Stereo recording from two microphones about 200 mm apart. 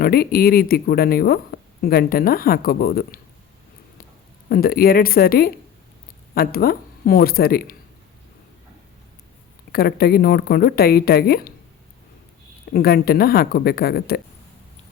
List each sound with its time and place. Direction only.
0.0 s speech: 50° left (ahead or behind)
4.4 s speech: 50° left (ahead or behind)
9.7 s speech: 50° left (ahead or behind)
12.7 s speech: 50° left (ahead or behind)